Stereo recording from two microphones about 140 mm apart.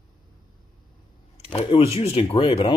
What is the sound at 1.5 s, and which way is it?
Speech, 45° left (ahead or behind).